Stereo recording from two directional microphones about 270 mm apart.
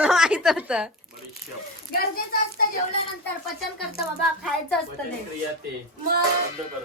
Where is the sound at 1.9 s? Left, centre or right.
Left.